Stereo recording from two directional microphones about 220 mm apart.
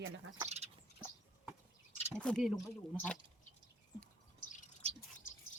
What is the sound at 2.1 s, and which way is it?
Speech, 5° left (ahead or behind).